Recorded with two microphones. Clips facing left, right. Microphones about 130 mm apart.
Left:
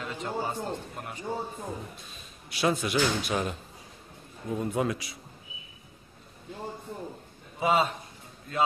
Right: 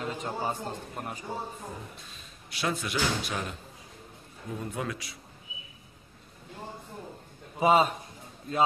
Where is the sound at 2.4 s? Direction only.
15° left (ahead or behind).